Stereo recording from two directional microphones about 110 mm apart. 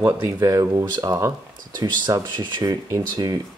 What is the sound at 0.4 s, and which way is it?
Speech, 35° right (ahead or behind).